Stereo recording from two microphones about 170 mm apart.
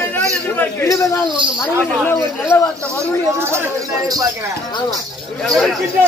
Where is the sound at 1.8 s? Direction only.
10° left (ahead or behind).